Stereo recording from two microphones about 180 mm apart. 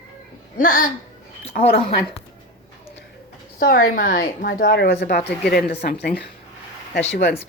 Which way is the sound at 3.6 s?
50° left (ahead or behind).